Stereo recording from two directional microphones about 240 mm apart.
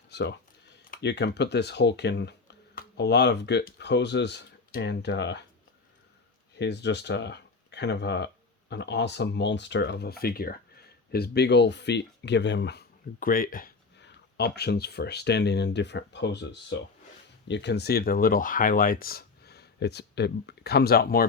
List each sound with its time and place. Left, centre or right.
0.1 s speech: left
6.6 s speech: left